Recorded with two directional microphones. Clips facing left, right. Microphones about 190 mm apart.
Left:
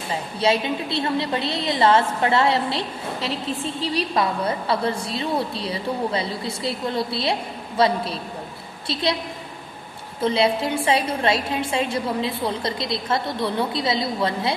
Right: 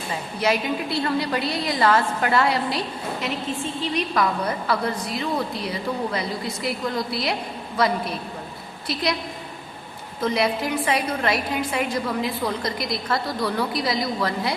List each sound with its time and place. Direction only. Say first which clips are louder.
0.3 s a woman's voice: left 1 dB; 25° left (ahead or behind)
10.2 s a woman's voice: left 2 dB; 30° left (ahead or behind)